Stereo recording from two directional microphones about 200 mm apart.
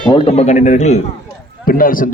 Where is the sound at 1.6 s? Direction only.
45° left (ahead or behind).